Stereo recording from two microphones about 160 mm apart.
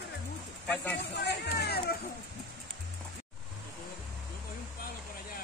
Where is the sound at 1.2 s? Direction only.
90° left.